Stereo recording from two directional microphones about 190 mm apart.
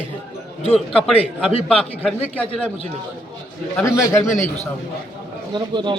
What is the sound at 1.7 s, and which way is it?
Speech, 5° left (ahead or behind).